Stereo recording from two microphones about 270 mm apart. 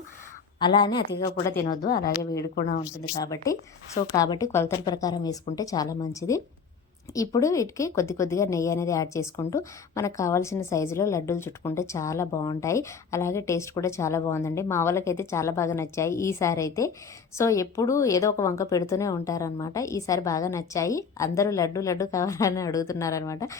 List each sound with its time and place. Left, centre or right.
0.6 s a woman's voice: centre
3.2 s a woman's voice: centre